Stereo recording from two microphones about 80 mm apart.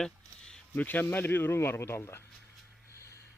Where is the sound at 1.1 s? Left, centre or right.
Left.